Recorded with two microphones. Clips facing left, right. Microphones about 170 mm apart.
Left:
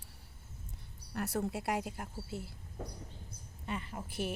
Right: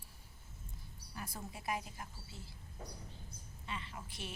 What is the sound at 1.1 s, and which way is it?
Speech, 75° left (ahead or behind).